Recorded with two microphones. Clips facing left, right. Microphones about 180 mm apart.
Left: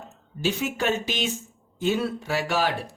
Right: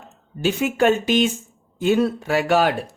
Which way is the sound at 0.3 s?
55° right (ahead or behind).